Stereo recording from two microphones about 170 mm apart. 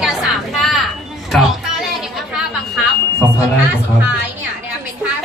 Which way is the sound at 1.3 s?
Centre (ahead or behind).